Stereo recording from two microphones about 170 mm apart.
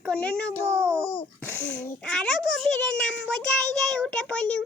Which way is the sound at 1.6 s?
10° left (ahead or behind).